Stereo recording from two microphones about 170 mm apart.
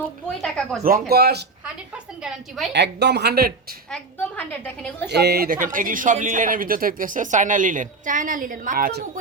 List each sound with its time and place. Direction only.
0.4 s a woman's voice: 5° left (ahead or behind)
0.8 s speech: 60° right (ahead or behind)
2.2 s a woman's voice: centre (ahead or behind)
2.7 s speech: 85° right
3.9 s a woman's voice: 10° left (ahead or behind)
5.0 s speech: 75° right (ahead or behind); by 8.9 s 55° right (ahead or behind)